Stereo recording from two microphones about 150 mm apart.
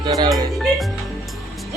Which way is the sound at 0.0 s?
30° right (ahead or behind).